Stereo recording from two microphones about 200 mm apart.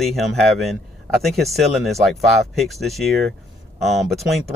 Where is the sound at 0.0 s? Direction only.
Centre (ahead or behind).